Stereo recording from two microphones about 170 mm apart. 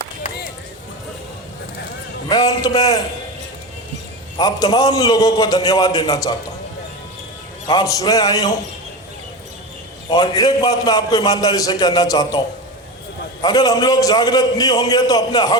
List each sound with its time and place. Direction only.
2.3 s a man's voice: 20° left (ahead or behind)
4.4 s a man's voice: 20° left (ahead or behind)
7.7 s a man's voice: 20° left (ahead or behind)
10.1 s a man's voice: 25° left (ahead or behind)
13.4 s a man's voice: 25° left (ahead or behind)